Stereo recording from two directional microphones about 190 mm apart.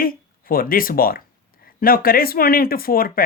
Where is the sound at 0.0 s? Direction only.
50° left (ahead or behind).